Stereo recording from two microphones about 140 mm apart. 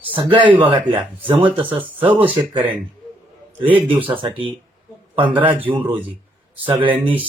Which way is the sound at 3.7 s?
40° right (ahead or behind).